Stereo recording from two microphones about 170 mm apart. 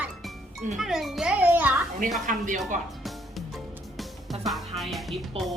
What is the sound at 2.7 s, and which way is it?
Speech, 50° right (ahead or behind).